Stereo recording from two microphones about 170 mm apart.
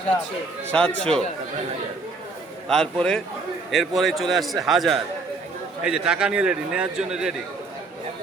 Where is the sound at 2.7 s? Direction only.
5° left (ahead or behind).